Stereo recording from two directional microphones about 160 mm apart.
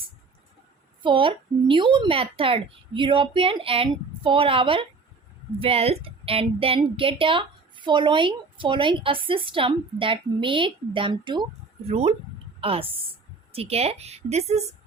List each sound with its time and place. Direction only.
1.0 s a woman's voice: 30° right (ahead or behind)
11.9 s a woman's voice: 40° right (ahead or behind)